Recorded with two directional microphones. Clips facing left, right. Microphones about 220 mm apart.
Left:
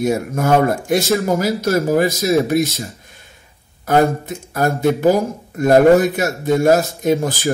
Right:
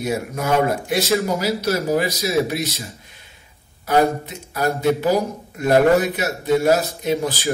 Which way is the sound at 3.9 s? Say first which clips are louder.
Left 3 dB; 50° left (ahead or behind).